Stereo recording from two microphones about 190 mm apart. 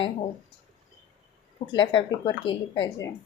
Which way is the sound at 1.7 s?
25° left (ahead or behind).